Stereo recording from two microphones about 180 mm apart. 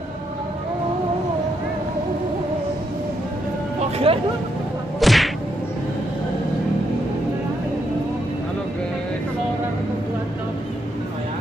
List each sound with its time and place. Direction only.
4.1 s speech: 30° right (ahead or behind)
5.0 s whack: centre (ahead or behind)